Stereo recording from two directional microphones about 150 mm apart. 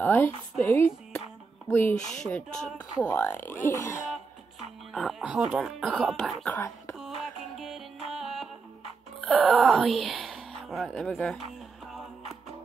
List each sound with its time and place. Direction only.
0.0 s speech: 15° left (ahead or behind)
2.0 s speech: 55° left (ahead or behind)
2.2 s speech: 5° left (ahead or behind)
3.0 s speech: 15° left (ahead or behind)
5.2 s speech: 5° right (ahead or behind)
6.4 s speech: 15° left (ahead or behind)
7.0 s music: centre (ahead or behind)
9.4 s speech: 10° right (ahead or behind)